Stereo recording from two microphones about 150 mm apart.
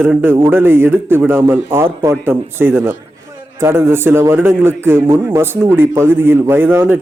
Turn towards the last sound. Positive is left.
turn(degrees=-15)  # may be behind; listen again after turning